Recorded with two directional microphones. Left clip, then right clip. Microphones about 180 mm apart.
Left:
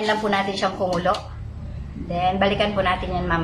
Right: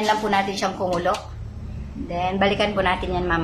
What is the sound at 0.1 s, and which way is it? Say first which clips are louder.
A woman's voice: right 1 dB; 5° right (ahead or behind).